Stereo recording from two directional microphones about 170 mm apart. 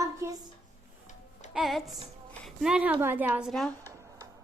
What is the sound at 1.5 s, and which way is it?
A woman's voice, centre (ahead or behind).